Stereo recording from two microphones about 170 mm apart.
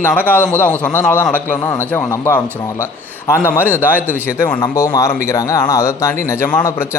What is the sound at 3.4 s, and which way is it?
Speech, 10° left (ahead or behind).